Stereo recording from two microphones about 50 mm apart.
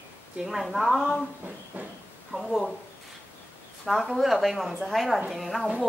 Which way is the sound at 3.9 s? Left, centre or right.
Centre.